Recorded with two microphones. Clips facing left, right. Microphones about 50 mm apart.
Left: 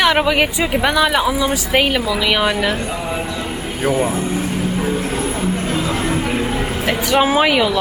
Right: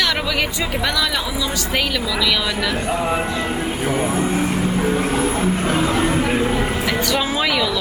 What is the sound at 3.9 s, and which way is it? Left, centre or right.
Speech, centre.